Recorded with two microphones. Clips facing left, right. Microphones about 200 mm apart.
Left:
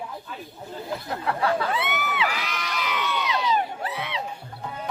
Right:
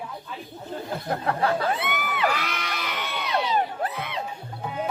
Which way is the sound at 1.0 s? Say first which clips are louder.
Right 1 dB; 45° right (ahead or behind).